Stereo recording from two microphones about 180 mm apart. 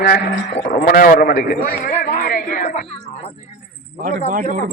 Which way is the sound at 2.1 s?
55° left (ahead or behind).